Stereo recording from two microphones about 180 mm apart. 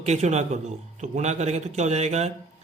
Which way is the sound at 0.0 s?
40° right (ahead or behind).